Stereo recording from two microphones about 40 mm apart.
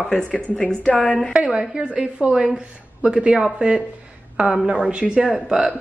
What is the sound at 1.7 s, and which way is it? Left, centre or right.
Speech, right.